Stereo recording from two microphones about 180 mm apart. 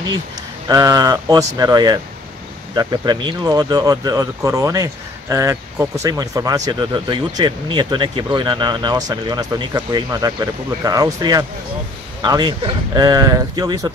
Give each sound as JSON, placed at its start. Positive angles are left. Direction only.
{"t": 0.7, "sound": "speech", "side_deg": -20}